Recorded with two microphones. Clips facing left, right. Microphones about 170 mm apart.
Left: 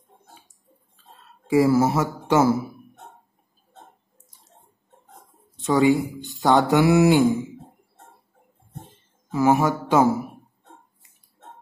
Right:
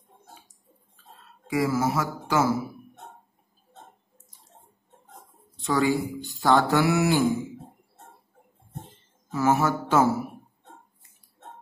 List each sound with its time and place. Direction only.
1.5 s speech: 30° left (ahead or behind)
5.6 s speech: 20° left (ahead or behind)
9.3 s speech: 15° left (ahead or behind)